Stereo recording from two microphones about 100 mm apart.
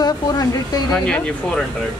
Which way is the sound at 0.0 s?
40° left (ahead or behind).